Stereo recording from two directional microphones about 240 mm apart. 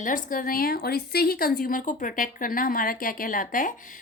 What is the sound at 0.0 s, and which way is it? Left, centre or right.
A woman's voice, left.